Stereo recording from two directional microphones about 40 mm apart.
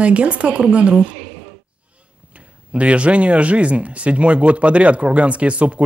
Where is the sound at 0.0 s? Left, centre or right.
Right.